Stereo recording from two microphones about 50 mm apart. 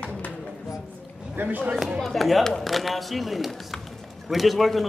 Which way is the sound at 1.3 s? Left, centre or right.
Right.